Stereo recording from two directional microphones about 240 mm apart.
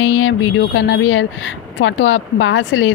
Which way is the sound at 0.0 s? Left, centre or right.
Left.